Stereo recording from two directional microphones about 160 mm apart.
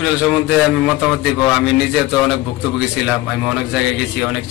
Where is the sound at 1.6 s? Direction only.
5° right (ahead or behind).